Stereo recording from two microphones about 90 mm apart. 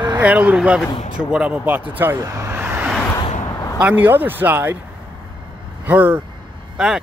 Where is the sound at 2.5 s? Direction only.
20° right (ahead or behind).